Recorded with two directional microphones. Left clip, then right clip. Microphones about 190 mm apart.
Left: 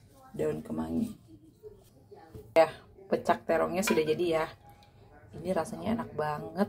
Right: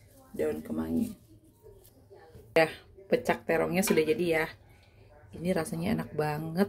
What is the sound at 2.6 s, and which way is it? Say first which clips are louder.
Speech: left 4 dB; 20° right (ahead or behind).